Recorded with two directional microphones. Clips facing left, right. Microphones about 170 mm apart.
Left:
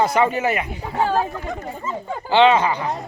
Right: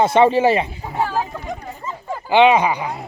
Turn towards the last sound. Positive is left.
turn(degrees=-10)  # may be behind; listen again after turning